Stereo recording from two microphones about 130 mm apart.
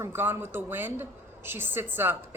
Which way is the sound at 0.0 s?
15° right (ahead or behind).